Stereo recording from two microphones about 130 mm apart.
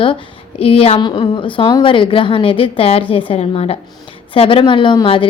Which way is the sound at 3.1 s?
45° left (ahead or behind).